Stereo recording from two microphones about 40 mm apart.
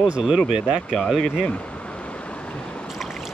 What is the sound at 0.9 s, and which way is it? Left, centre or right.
Speech, centre.